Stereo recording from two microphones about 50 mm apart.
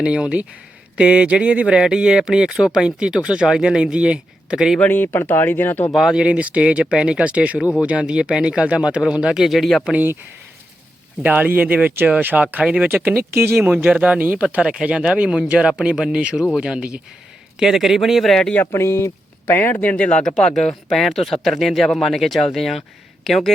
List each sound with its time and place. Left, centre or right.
0.0 s speech: right
4.9 s speech: left
5.9 s speech: centre
6.1 s speech: right; by 9.8 s centre
11.2 s speech: right
12.6 s speech: right
13.7 s speech: right
14.5 s speech: centre
17.6 s speech: centre
18.3 s speech: centre
18.6 s speech: left
19.5 s speech: left
20.2 s speech: centre